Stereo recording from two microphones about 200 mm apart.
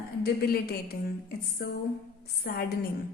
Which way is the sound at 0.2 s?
50° left (ahead or behind).